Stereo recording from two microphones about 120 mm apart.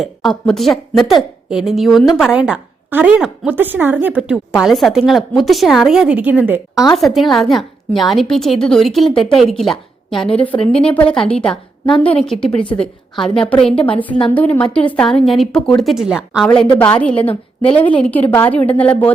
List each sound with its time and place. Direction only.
0.0 s a woman's voice: centre (ahead or behind)
6.9 s a woman's voice: centre (ahead or behind)
10.3 s a woman's voice: 15° left (ahead or behind)
10.6 s a woman's voice: 50° left (ahead or behind)
10.8 s a woman's voice: 10° left (ahead or behind)
16.7 s a woman's voice: 10° left (ahead or behind)